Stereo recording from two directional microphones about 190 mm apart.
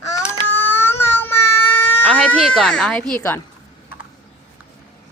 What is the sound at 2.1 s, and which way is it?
A woman's voice, 5° left (ahead or behind).